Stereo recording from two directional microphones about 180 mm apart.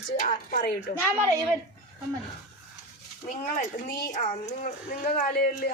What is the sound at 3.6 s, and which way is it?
Speech, 50° left (ahead or behind).